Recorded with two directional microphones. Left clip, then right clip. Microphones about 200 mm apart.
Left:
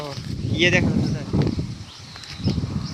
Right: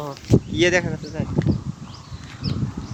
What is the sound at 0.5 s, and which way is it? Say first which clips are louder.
Speech: left 3 dB; 25° right (ahead or behind).